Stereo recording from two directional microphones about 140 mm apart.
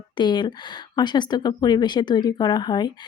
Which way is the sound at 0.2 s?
30° left (ahead or behind).